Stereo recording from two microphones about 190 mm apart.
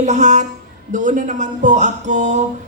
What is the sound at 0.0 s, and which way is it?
Speech, 40° right (ahead or behind).